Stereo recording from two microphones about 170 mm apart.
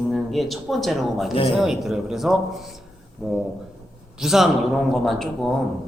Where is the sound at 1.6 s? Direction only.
Centre (ahead or behind).